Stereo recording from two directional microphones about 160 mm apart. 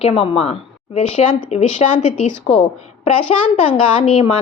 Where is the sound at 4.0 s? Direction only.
40° left (ahead or behind).